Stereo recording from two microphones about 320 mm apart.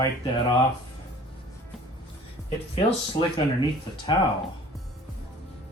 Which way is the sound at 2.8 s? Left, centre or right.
Centre.